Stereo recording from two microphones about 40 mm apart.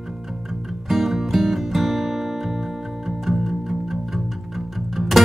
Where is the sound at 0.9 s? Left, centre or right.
Centre.